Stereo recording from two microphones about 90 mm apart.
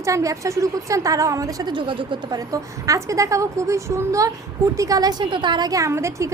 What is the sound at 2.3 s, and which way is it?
A woman's voice, 40° right (ahead or behind).